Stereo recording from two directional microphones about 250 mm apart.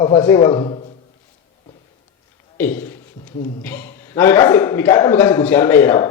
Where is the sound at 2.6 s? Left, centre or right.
Centre.